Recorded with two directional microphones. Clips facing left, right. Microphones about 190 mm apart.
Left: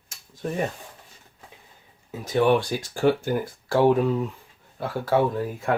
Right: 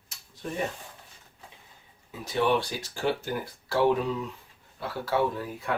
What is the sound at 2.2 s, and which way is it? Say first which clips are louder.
Speech: left 5 dB; 50° left (ahead or behind).